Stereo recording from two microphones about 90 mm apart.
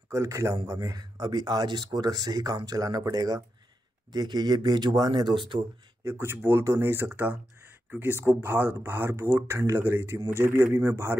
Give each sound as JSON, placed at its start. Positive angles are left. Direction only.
{"t": 0.1, "sound": "a man's voice", "side_deg": -35}
{"t": 6.0, "sound": "speech", "side_deg": -25}